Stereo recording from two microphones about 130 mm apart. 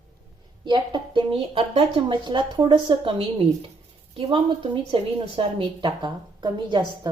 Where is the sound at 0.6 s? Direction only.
35° right (ahead or behind).